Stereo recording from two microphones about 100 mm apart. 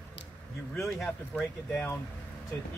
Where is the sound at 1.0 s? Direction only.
10° left (ahead or behind).